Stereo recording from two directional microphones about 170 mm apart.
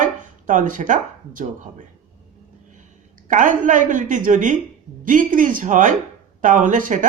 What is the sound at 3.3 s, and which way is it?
A man's voice, 50° right (ahead or behind).